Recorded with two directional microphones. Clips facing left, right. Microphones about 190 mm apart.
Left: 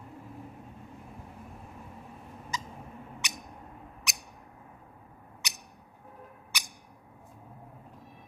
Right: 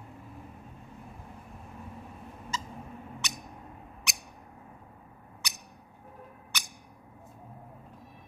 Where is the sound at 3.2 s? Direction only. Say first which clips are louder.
Even; 15° left (ahead or behind).